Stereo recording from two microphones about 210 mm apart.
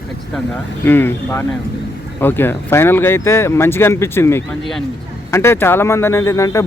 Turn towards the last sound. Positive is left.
turn(degrees=15)  # may be behind; listen again after turning